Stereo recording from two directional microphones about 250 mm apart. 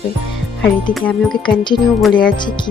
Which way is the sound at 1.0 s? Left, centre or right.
Centre.